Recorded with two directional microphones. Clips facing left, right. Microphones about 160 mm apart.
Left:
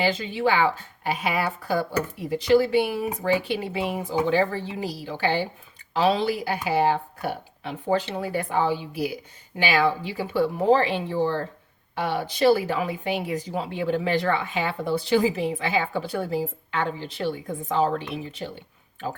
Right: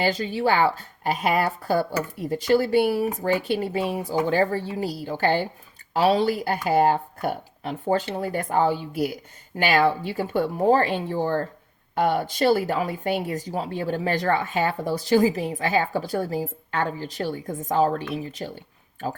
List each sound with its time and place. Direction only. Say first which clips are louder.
0.0 s speech: right 1 dB; 40° right (ahead or behind)
3.8 s speech: right 2 dB; 15° left (ahead or behind)
4.0 s speech: left 1 dB; 45° right (ahead or behind)